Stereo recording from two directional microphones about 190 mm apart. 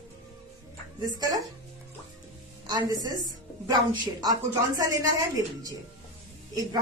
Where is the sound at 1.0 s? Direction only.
20° right (ahead or behind).